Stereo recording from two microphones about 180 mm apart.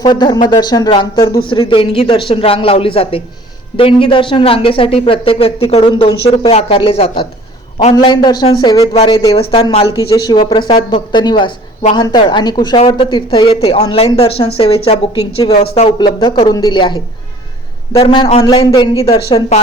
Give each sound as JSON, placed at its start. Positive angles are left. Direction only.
{"t": 0.0, "sound": "a woman's voice", "side_deg": 25}
{"t": 8.9, "sound": "a woman's voice", "side_deg": 35}